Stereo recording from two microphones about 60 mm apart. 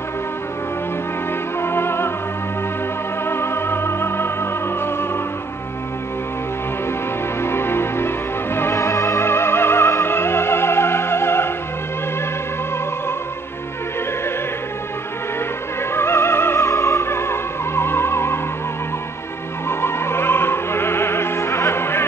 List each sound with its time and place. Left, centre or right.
1.6 s music: left
3.3 s music: left
7.4 s music: left
8.7 s music: left
15.9 s music: left
19.7 s opera: left